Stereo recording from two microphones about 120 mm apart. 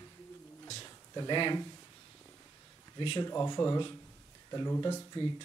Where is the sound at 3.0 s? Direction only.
40° left (ahead or behind).